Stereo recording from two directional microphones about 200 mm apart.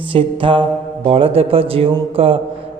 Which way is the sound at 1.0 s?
30° right (ahead or behind).